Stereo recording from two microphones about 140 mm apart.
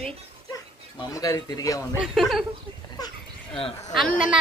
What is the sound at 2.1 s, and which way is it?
Speech, centre (ahead or behind).